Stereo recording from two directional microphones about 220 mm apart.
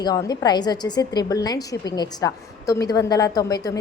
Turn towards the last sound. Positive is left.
turn(degrees=15)  # may be behind; listen again after turning